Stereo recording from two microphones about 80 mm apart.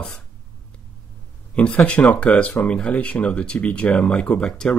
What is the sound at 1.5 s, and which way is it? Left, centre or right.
Speech, centre.